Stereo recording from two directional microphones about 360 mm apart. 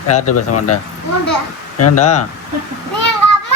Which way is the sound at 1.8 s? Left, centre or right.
Left.